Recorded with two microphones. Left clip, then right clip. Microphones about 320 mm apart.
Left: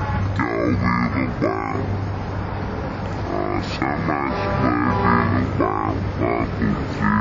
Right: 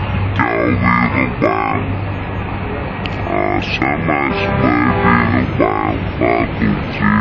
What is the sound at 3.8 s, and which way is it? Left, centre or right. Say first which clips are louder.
Music: right 5 dB; centre.